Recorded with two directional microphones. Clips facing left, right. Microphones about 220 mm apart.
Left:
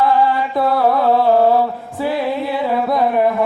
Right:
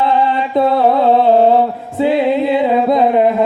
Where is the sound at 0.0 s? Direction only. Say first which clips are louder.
Right 1 dB; 25° right (ahead or behind).